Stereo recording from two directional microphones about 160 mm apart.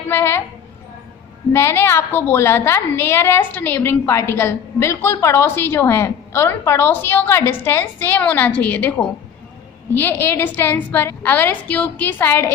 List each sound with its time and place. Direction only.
0.1 s a woman's voice: 15° left (ahead or behind)
1.5 s a woman's voice: 15° left (ahead or behind)